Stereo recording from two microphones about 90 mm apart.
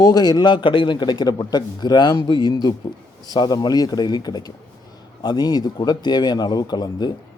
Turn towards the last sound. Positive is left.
turn(degrees=50)  # may be behind; listen again after turning